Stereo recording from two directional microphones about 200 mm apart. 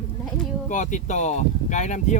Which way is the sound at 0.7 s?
40° left (ahead or behind).